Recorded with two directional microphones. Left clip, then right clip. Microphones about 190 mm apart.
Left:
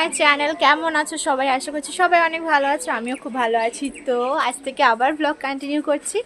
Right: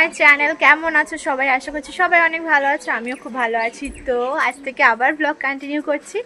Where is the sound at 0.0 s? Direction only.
15° left (ahead or behind).